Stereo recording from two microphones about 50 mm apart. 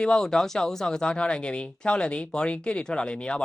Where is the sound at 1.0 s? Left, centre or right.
Centre.